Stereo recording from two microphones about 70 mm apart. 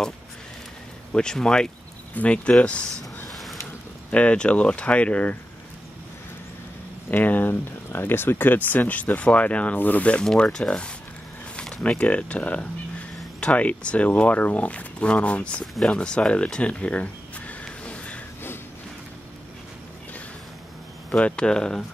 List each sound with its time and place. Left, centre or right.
1.1 s speech: centre
3.3 s a sound: centre
4.1 s speech: centre
7.1 s speech: left
10.2 s speech: centre
11.5 s a sound: centre
12.0 s speech: centre
21.1 s speech: centre